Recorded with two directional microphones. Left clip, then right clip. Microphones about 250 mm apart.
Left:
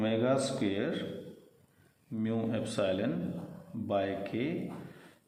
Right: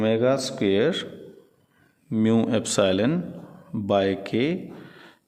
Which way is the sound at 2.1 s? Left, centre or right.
Right.